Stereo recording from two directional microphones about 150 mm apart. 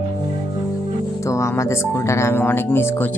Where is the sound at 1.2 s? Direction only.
20° left (ahead or behind).